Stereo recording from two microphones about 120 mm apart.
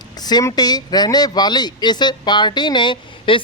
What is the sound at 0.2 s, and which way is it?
Speech, 35° left (ahead or behind).